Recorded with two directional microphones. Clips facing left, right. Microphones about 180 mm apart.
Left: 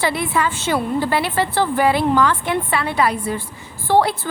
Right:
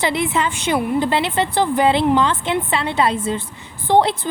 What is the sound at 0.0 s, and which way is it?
A woman's voice, 20° right (ahead or behind).